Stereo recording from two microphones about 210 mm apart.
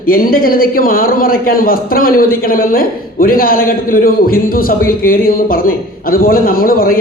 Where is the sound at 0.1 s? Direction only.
45° left (ahead or behind).